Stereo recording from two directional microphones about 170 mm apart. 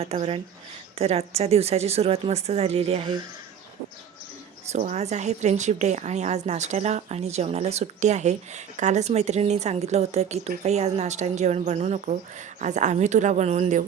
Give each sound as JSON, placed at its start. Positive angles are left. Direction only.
{"t": 0.0, "sound": "a woman's voice", "side_deg": -35}
{"t": 4.7, "sound": "a woman's voice", "side_deg": -40}